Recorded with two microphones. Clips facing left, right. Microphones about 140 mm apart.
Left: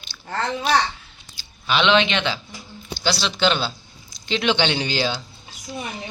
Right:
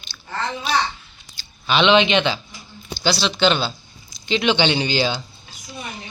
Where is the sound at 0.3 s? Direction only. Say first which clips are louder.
Left 3 dB; 50° left (ahead or behind).